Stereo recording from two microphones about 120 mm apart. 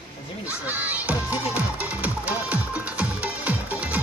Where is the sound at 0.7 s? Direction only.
15° right (ahead or behind).